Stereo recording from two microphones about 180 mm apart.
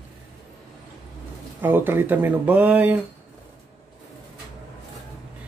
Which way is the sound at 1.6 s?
10° right (ahead or behind).